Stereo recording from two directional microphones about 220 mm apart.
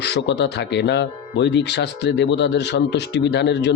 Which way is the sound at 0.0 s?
50° left (ahead or behind).